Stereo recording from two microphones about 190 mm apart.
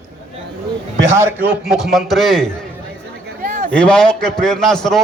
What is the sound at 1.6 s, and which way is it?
Speech, centre (ahead or behind).